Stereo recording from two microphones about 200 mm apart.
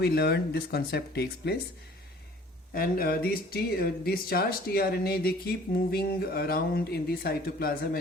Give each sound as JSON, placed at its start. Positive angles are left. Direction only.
{"t": 0.0, "sound": "speech", "side_deg": 50}
{"t": 2.7, "sound": "speech", "side_deg": 50}